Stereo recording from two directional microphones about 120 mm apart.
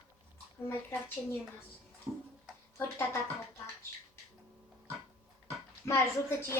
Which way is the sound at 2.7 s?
25° left (ahead or behind).